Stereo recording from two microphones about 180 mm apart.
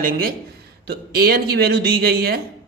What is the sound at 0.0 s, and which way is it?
A man's voice, 50° right (ahead or behind).